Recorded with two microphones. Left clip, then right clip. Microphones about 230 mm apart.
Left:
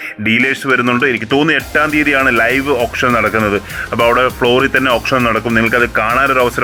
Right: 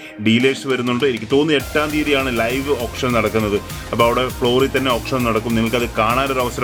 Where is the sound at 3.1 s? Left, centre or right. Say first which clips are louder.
Left 5 dB; left.